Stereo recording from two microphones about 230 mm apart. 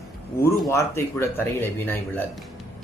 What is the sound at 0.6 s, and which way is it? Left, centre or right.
Speech, centre.